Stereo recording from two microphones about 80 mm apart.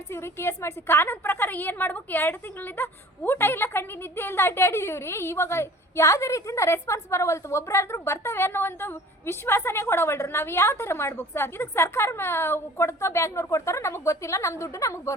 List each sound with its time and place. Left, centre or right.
0.1 s a woman's voice: left